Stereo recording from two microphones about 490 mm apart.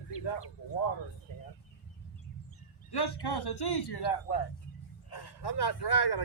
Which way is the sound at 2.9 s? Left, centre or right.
Left.